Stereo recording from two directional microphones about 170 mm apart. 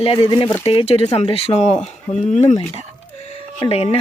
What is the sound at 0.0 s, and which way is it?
Speech, 35° left (ahead or behind).